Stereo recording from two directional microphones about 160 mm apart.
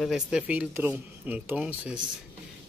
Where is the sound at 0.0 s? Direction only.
Centre (ahead or behind).